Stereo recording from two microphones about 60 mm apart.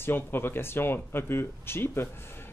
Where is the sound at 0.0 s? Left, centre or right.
Left.